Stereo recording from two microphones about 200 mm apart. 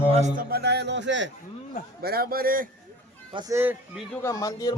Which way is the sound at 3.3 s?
20° right (ahead or behind).